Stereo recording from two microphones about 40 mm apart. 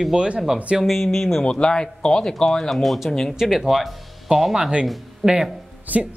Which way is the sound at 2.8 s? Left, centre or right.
Centre.